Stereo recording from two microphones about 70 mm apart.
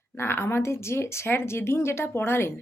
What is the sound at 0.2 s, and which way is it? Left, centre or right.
Speech, left.